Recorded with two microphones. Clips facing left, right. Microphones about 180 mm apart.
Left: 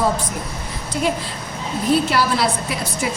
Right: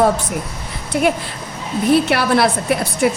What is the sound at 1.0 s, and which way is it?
A woman's voice, 65° right (ahead or behind).